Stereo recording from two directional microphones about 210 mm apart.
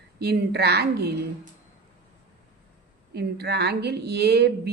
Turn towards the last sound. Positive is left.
turn(degrees=-50)  # may be behind; listen again after turning